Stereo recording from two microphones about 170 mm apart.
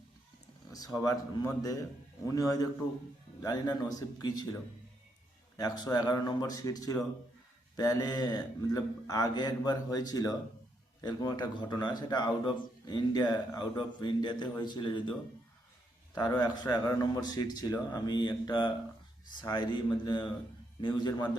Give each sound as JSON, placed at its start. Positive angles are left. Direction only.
{"t": 0.7, "sound": "speech", "side_deg": 20}
{"t": 5.5, "sound": "speech", "side_deg": 25}
{"t": 16.1, "sound": "speech", "side_deg": 25}